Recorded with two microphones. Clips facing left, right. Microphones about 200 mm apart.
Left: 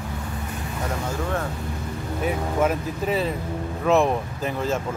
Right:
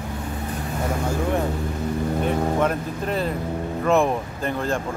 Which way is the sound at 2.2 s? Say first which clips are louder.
Left 1 dB; 5° left (ahead or behind).